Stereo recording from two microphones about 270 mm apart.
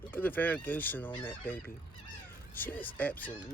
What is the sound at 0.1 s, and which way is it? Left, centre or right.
Speech, centre.